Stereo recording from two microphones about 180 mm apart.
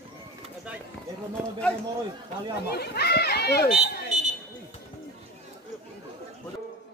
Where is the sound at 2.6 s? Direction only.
60° left (ahead or behind).